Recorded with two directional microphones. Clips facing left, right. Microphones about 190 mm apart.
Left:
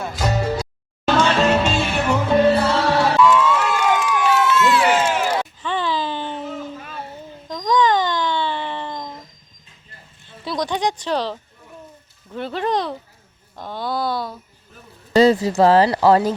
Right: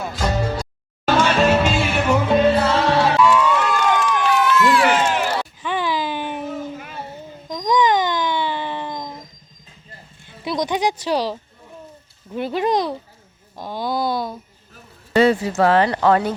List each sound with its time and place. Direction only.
0.0 s music: centre (ahead or behind)
1.0 s music: 10° right (ahead or behind)
3.2 s crowd: 5° right (ahead or behind)
4.4 s crowd: 25° left (ahead or behind)
4.8 s run: 5° left (ahead or behind)
5.6 s a sound: 10° right (ahead or behind)
10.2 s a sound: 20° right (ahead or behind)
11.0 s speech: 10° right (ahead or behind)
15.1 s speech: 35° left (ahead or behind)